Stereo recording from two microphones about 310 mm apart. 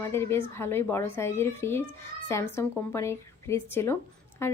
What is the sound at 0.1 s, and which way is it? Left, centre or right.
Speech, centre.